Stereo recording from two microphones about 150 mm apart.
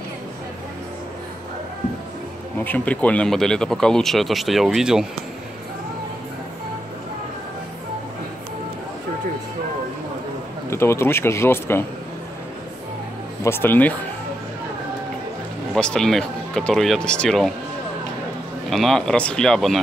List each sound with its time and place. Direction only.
2.6 s speech: 10° left (ahead or behind)
10.7 s speech: 15° left (ahead or behind)
13.4 s speech: 15° left (ahead or behind)
15.7 s speech: 5° left (ahead or behind)
18.7 s speech: centre (ahead or behind)